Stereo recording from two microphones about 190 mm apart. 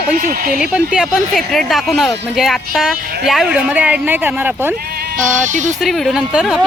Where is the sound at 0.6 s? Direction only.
5° right (ahead or behind).